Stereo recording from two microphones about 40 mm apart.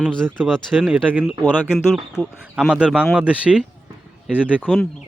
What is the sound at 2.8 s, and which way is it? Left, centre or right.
Speech, right.